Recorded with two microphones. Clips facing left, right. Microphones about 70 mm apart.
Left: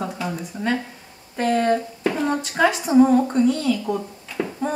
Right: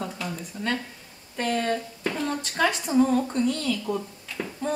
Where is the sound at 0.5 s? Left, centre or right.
Left.